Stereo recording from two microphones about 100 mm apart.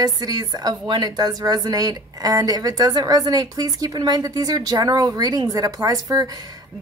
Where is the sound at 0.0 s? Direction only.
40° right (ahead or behind).